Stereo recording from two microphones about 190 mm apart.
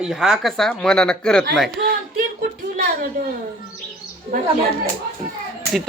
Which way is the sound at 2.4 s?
50° right (ahead or behind).